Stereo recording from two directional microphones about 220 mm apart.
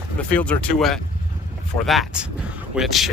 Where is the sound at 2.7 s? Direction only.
Centre (ahead or behind).